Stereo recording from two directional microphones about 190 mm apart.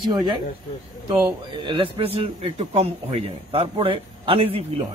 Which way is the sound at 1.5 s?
25° right (ahead or behind).